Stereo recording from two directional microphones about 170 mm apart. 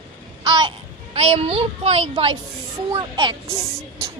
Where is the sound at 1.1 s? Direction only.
35° right (ahead or behind).